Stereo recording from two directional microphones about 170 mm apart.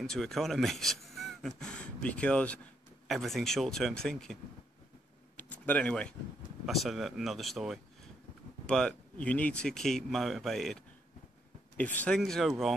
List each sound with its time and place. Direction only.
0.0 s speech: 5° left (ahead or behind)
5.4 s speech: 10° left (ahead or behind)